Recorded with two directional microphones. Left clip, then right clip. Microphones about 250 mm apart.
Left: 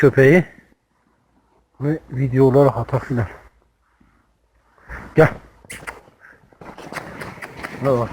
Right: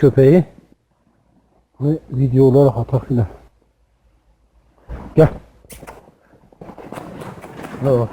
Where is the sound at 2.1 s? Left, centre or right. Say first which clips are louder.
Right 3 dB; centre.